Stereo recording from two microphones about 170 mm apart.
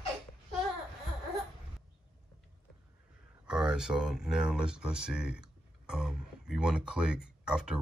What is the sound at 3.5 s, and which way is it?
Speech, 5° right (ahead or behind).